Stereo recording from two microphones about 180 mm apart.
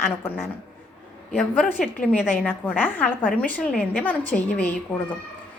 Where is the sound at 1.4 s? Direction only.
Centre (ahead or behind).